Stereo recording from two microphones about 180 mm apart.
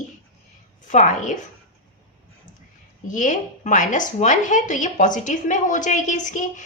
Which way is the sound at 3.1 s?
45° left (ahead or behind).